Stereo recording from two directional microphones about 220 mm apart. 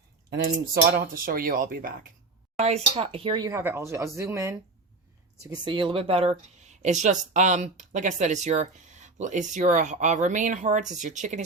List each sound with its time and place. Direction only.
0.3 s speech: 45° right (ahead or behind)
2.6 s speech: 30° right (ahead or behind)